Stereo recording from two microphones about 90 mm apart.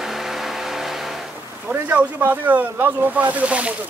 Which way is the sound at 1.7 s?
20° right (ahead or behind).